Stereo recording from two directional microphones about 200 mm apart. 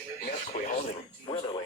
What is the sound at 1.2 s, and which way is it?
Speech, 25° left (ahead or behind).